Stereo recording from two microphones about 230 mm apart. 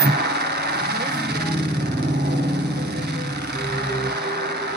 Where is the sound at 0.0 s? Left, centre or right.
Right.